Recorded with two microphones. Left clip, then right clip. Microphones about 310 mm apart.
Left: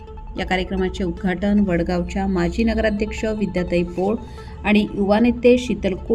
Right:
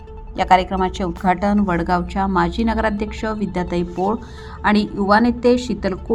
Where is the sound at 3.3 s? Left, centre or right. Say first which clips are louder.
Even; right.